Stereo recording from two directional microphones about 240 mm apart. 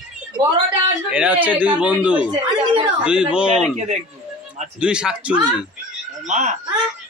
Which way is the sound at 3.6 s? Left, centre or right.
Right.